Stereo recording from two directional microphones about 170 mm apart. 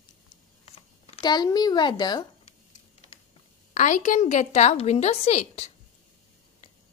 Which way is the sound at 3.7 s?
50° left (ahead or behind).